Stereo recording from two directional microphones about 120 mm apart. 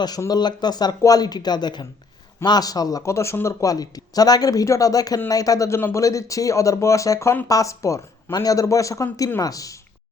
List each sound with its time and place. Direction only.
0.0 s speech: 35° left (ahead or behind)